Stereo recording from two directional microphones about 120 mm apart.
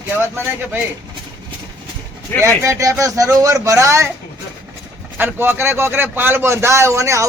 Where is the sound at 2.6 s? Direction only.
25° right (ahead or behind).